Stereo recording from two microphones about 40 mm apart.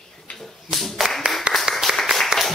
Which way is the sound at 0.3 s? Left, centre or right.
Left.